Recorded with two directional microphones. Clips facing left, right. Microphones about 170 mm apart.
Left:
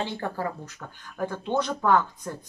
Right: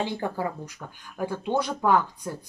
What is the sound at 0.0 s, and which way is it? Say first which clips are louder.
Speech: right 2 dB; 15° right (ahead or behind).